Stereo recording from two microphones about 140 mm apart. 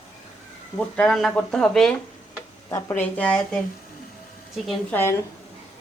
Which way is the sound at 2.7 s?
20° left (ahead or behind).